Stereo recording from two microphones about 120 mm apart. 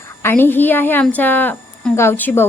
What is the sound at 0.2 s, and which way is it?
A woman's voice, 20° left (ahead or behind).